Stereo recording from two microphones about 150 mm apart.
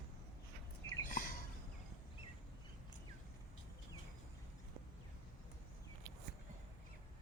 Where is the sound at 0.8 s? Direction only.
20° left (ahead or behind).